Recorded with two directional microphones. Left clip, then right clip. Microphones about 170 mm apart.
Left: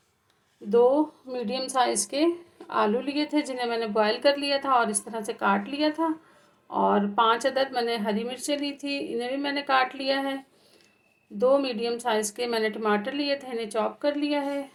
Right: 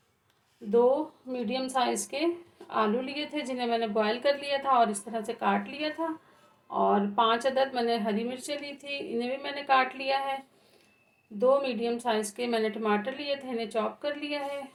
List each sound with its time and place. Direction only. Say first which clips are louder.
1.3 s a woman's voice: left 2 dB; 40° left (ahead or behind)
11.3 s a woman's voice: left 2 dB; 40° left (ahead or behind)